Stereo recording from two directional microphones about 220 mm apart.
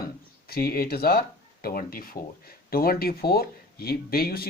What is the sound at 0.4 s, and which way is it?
Speech, 45° left (ahead or behind).